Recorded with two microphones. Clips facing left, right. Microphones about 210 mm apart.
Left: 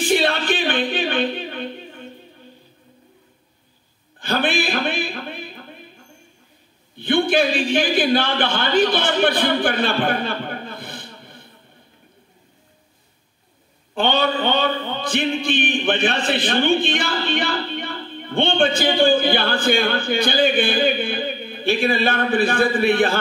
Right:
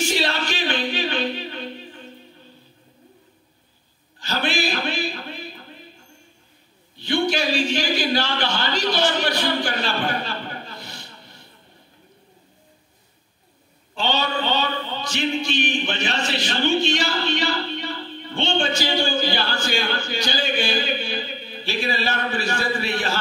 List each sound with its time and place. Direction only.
0.0 s music: 55° left (ahead or behind)
4.2 s a sound: 55° left (ahead or behind)
7.0 s a man's voice: 55° left (ahead or behind)
13.9 s speech: 55° left (ahead or behind)